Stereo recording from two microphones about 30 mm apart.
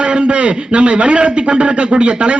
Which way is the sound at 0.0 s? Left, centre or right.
Right.